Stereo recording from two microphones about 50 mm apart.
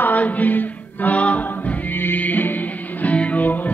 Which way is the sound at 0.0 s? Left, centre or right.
Left.